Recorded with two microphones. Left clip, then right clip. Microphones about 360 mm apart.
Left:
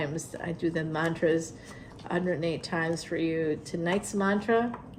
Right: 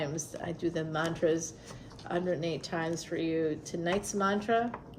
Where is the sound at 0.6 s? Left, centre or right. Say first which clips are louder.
Left 3 dB; left.